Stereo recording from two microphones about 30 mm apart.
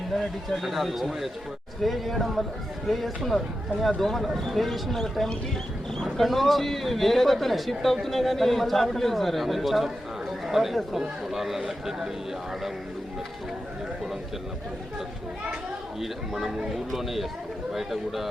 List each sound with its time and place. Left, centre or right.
0.1 s a man's voice: centre
6.1 s a man's voice: centre
16.3 s speech: centre
16.7 s a man's voice: centre